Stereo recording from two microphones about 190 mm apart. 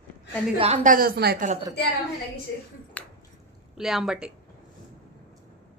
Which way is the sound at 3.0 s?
5° left (ahead or behind).